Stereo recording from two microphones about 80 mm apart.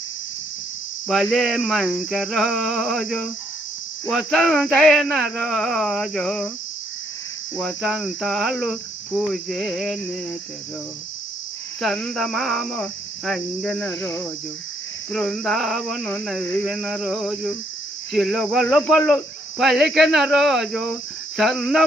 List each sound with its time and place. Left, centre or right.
1.0 s speech: centre
7.5 s speech: centre
9.6 s a sound: centre
11.8 s speech: centre
15.1 s speech: centre
16.0 s a sound: centre
16.7 s speech: centre